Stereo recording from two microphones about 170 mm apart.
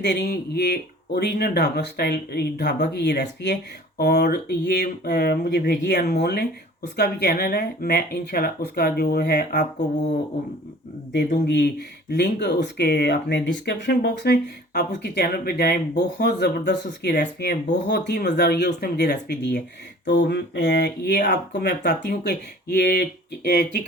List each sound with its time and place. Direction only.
0.0 s speech: 75° left (ahead or behind)
9.7 s speech: 45° left (ahead or behind)
11.1 s speech: 90° left
20.1 s speech: 90° left; by 23.6 s 70° left (ahead or behind)